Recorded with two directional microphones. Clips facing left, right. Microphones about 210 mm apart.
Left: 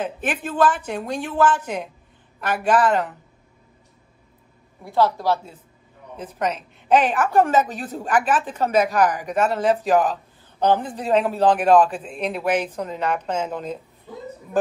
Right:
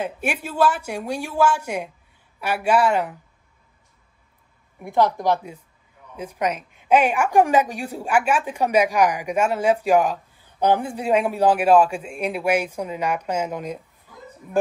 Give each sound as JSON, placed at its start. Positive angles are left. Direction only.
{"t": 0.0, "sound": "a woman's voice", "side_deg": -10}
{"t": 4.8, "sound": "a woman's voice", "side_deg": -15}